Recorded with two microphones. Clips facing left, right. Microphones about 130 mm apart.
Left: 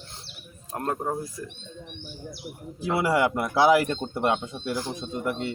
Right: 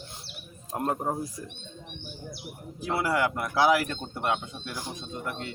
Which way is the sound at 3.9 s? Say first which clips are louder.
Left 5 dB; 25° left (ahead or behind).